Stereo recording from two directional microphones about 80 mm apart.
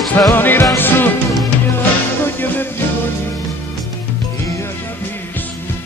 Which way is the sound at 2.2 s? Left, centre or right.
Left.